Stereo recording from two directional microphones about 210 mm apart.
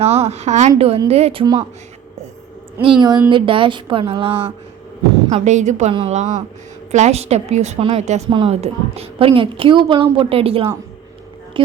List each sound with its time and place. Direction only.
0.0 s a woman's voice: 30° right (ahead or behind)
2.8 s a woman's voice: 20° right (ahead or behind)
5.3 s a woman's voice: 35° right (ahead or behind)